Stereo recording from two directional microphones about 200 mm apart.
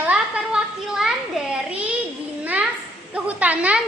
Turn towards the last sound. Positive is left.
turn(degrees=-5)  # may be behind; listen again after turning